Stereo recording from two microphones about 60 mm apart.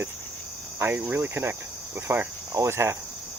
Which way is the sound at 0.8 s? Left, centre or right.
Right.